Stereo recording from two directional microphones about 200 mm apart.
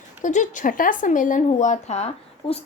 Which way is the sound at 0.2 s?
40° left (ahead or behind).